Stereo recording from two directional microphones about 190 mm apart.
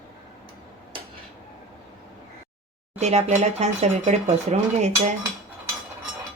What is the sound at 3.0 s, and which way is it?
Speech, 35° right (ahead or behind).